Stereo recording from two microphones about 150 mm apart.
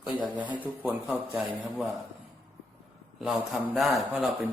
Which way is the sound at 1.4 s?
Centre (ahead or behind).